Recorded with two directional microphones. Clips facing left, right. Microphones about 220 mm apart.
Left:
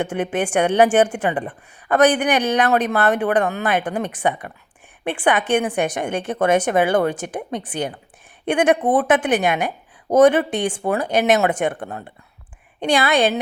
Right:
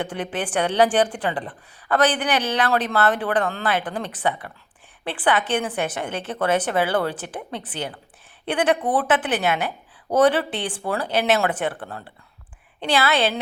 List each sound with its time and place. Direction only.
0.0 s a woman's voice: 10° left (ahead or behind)